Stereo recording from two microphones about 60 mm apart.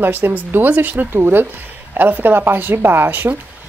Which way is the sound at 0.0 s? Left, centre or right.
Right.